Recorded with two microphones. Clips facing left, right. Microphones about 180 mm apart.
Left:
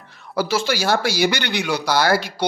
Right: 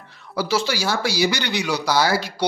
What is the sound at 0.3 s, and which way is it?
Speech, 50° left (ahead or behind).